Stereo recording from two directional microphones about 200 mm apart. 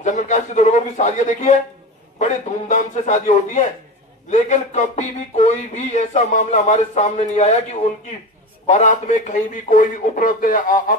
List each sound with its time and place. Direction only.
0.0 s speech: 35° left (ahead or behind)
8.6 s speech: 40° left (ahead or behind)